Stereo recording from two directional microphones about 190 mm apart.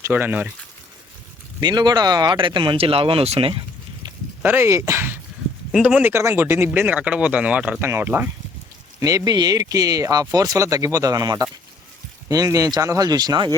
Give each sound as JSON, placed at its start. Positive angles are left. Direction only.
{"t": 0.0, "sound": "speech", "side_deg": -10}
{"t": 1.6, "sound": "speech", "side_deg": -20}
{"t": 4.4, "sound": "speech", "side_deg": -15}